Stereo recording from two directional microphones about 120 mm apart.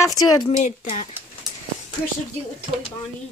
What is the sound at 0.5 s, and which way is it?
Speech, 85° left.